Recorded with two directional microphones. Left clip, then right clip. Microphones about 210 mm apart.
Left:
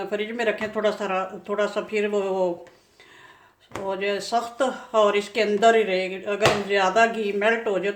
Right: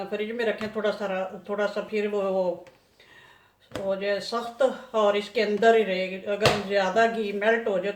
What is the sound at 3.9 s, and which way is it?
Speech, 50° left (ahead or behind).